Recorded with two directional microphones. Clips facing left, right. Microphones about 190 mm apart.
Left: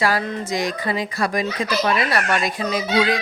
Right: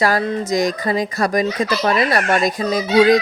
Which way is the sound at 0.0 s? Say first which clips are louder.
Right 4 dB; 40° right (ahead or behind).